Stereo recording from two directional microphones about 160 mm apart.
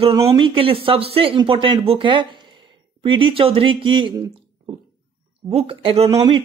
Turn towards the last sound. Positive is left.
turn(degrees=-35)  # may be behind; listen again after turning